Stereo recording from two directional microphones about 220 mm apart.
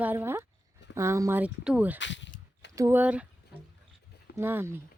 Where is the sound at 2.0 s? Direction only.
55° left (ahead or behind).